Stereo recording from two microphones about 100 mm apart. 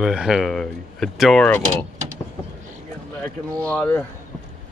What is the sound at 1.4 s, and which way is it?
Speech, 15° left (ahead or behind).